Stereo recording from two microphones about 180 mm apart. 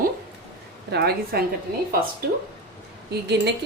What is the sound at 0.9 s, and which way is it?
Speech, 65° right (ahead or behind).